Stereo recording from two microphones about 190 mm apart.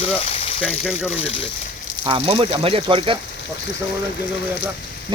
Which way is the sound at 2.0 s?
30° right (ahead or behind).